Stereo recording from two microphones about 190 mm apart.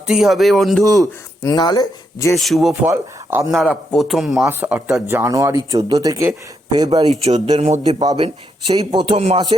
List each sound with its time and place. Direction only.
0.1 s speech: centre (ahead or behind)
1.4 s speech: 20° left (ahead or behind)
2.3 s speech: centre (ahead or behind)
2.9 s speech: 10° right (ahead or behind)
3.5 s speech: centre (ahead or behind); by 7.0 s 20° right (ahead or behind)
7.2 s a man's voice: 30° right (ahead or behind)
8.7 s speech: 20° right (ahead or behind)